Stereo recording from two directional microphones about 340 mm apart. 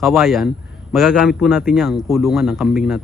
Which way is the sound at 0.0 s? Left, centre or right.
Centre.